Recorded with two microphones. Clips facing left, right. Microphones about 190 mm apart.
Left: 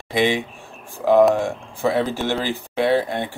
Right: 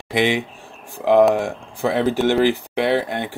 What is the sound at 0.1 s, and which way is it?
Speech, 15° right (ahead or behind).